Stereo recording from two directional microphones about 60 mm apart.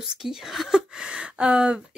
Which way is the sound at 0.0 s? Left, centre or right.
Centre.